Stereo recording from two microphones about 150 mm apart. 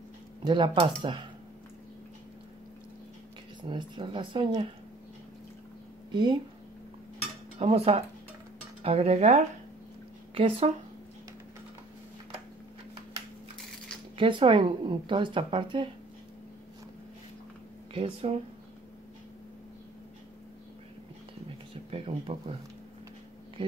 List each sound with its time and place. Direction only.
0.4 s speech: 30° right (ahead or behind)
3.6 s speech: 30° right (ahead or behind)
6.1 s speech: 30° right (ahead or behind)
7.5 s speech: 40° right (ahead or behind)
14.1 s speech: 35° right (ahead or behind)
17.9 s speech: 45° right (ahead or behind)
21.9 s a sound: 40° right (ahead or behind)